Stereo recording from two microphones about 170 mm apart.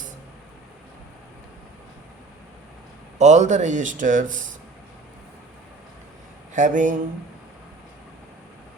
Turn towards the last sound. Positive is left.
turn(degrees=-50)  # may be behind; listen again after turning